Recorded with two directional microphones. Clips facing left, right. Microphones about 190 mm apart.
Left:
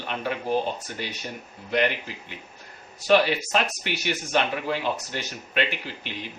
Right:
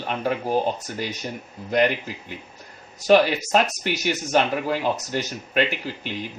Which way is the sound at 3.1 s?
40° right (ahead or behind).